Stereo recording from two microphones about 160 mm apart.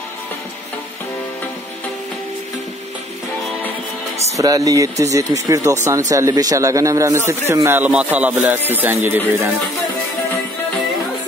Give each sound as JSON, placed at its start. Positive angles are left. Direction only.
{"t": 4.4, "sound": "speech", "side_deg": -20}